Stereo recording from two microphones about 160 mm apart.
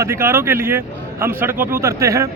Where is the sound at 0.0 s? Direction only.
15° right (ahead or behind).